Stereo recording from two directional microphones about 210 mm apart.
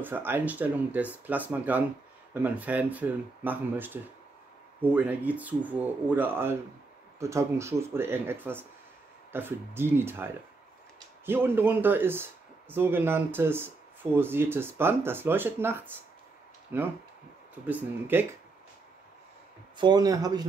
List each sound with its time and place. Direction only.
0.0 s speech: 10° right (ahead or behind)
19.8 s speech: 20° right (ahead or behind)